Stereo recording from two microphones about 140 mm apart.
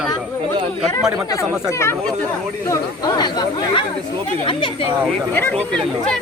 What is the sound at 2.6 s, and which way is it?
Speech, 30° left (ahead or behind).